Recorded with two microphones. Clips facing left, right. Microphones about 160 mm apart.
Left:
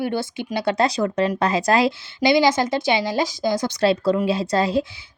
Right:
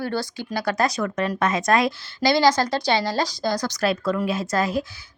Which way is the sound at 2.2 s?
20° left (ahead or behind).